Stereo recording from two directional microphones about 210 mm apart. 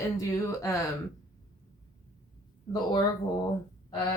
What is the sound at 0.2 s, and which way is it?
Speech, 15° left (ahead or behind).